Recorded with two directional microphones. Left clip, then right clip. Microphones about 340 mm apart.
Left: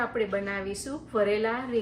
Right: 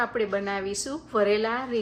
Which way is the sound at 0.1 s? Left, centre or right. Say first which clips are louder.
Right 2 dB; centre.